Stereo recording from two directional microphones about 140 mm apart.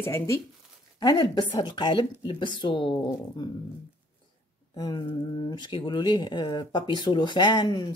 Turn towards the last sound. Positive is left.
turn(degrees=30)  # may be behind; listen again after turning